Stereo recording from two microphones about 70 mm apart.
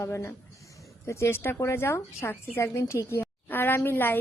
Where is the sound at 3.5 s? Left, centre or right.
Left.